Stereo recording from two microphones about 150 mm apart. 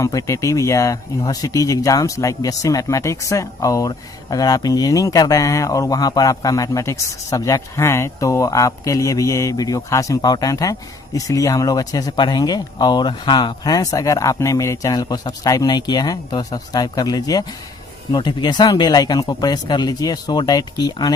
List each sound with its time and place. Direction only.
0.0 s speech: 20° left (ahead or behind)